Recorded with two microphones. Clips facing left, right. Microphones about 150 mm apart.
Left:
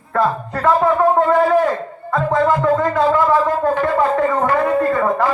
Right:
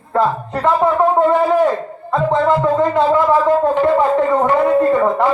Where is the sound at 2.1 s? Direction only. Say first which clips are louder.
Right 1 dB; 25° right (ahead or behind).